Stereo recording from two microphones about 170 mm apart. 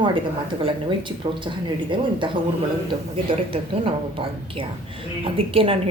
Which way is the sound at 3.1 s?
30° right (ahead or behind).